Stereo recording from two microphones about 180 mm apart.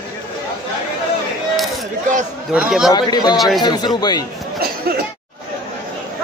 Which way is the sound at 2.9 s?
20° left (ahead or behind).